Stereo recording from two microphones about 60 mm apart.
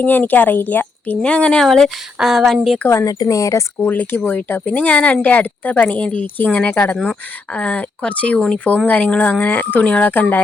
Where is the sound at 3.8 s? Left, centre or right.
Left.